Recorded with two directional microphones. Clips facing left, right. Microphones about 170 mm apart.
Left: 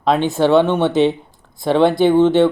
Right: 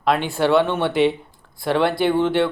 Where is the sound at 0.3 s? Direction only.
20° left (ahead or behind).